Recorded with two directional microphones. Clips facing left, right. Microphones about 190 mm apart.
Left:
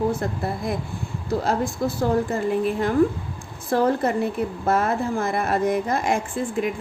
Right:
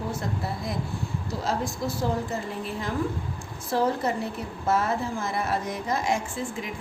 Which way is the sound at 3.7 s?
55° left (ahead or behind).